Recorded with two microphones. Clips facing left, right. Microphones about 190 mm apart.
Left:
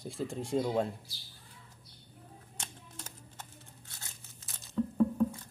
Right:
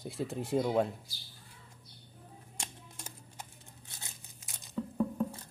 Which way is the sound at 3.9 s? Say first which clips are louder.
Right 1 dB; 15° right (ahead or behind).